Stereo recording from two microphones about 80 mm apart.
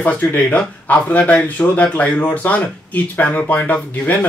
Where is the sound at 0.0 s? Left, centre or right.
Left.